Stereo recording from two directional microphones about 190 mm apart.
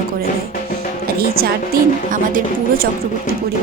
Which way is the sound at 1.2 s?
55° right (ahead or behind).